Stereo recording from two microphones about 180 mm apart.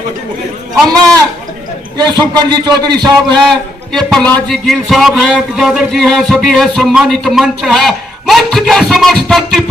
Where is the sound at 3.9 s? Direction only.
5° left (ahead or behind).